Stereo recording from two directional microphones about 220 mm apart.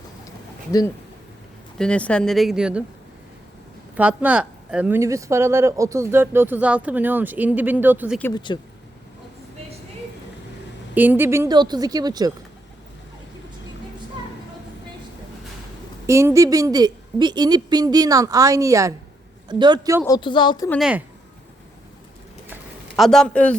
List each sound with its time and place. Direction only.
1.8 s speech: 5° left (ahead or behind)
3.9 s speech: 5° right (ahead or behind)
8.5 s a woman's voice: 20° left (ahead or behind)
10.9 s speech: 10° right (ahead or behind)
16.0 s speech: 15° right (ahead or behind)
20.1 s a woman's voice: 20° left (ahead or behind)
20.7 s speech: centre (ahead or behind)
23.0 s speech: centre (ahead or behind)